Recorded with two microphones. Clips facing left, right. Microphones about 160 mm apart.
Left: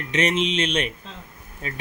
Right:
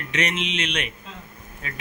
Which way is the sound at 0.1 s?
35° left (ahead or behind).